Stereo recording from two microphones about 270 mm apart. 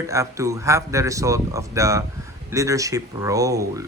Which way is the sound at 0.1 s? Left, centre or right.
Centre.